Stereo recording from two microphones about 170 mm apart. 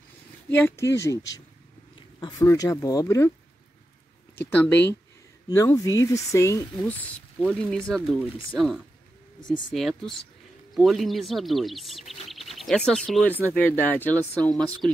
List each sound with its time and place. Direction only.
0.5 s speech: 10° left (ahead or behind)
2.1 s speech: 25° left (ahead or behind)
4.4 s speech: 10° left (ahead or behind)